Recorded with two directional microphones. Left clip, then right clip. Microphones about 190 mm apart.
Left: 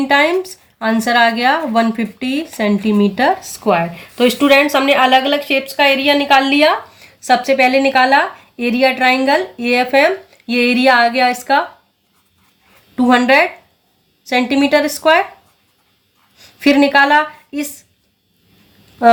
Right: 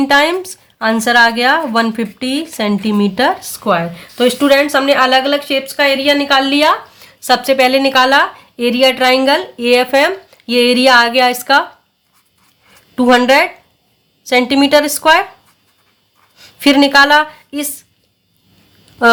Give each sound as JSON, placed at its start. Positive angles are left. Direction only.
{"t": 0.2, "sound": "a woman's voice", "side_deg": -45}
{"t": 7.0, "sound": "a woman's voice", "side_deg": -45}
{"t": 13.0, "sound": "a woman's voice", "side_deg": -50}
{"t": 16.4, "sound": "a sound", "side_deg": -50}